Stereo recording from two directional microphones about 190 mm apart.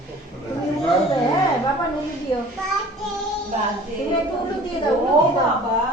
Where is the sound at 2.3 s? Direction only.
30° left (ahead or behind).